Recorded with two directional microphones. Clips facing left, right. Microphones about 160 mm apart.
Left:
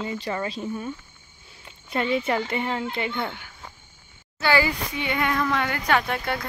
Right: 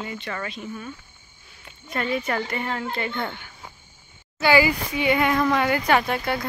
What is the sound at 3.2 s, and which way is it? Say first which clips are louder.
Speech: even; 5° left (ahead or behind).